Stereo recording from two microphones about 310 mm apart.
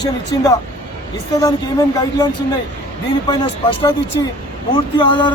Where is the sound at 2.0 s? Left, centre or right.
Centre.